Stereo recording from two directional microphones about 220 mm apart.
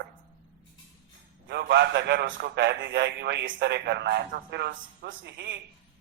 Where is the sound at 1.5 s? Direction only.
50° right (ahead or behind).